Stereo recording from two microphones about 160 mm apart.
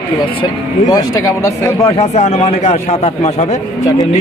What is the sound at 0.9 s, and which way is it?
Speech, 20° left (ahead or behind).